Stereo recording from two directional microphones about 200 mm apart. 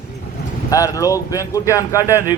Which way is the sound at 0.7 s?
15° left (ahead or behind).